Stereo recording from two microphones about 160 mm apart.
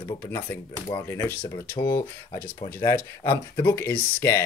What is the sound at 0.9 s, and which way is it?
Speech, 15° left (ahead or behind).